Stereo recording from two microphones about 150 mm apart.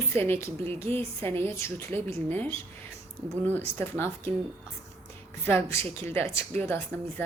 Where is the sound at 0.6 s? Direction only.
40° right (ahead or behind).